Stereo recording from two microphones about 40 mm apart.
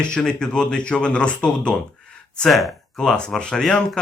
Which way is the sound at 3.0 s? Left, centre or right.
Centre.